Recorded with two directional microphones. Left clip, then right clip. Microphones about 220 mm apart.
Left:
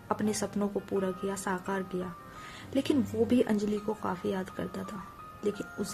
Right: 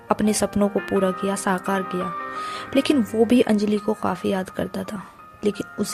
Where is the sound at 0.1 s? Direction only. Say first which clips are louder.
Right 10 dB; 40° right (ahead or behind).